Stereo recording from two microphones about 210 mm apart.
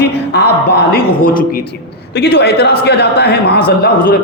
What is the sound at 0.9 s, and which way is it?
A man's voice, 45° left (ahead or behind).